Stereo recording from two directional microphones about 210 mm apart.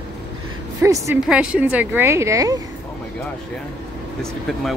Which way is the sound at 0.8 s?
15° right (ahead or behind).